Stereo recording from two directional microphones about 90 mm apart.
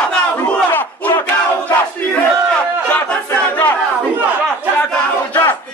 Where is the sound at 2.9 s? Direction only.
20° left (ahead or behind).